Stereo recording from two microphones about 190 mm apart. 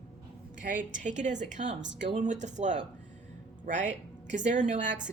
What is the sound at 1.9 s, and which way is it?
Speech, 70° right (ahead or behind).